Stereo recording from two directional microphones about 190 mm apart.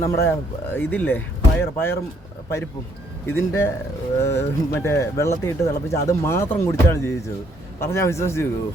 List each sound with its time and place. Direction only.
0.0 s speech: 10° left (ahead or behind)
3.2 s speech: 10° left (ahead or behind)